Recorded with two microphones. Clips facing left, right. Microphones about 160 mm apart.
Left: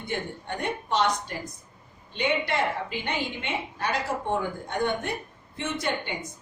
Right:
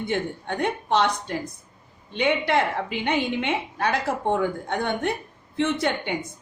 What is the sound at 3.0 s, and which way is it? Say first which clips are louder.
A woman's voice: right 7 dB; 70° right (ahead or behind).